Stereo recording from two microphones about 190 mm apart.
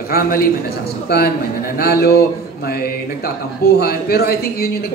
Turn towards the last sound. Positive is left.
turn(degrees=55)  # may be behind; listen again after turning